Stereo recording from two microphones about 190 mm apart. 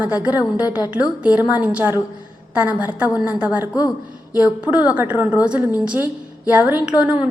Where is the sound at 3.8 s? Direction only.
20° left (ahead or behind).